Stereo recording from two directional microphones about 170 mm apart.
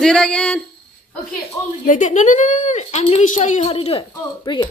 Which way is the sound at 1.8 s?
50° left (ahead or behind).